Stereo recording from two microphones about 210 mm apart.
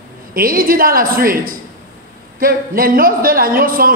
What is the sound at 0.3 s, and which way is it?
A man's voice, 45° right (ahead or behind).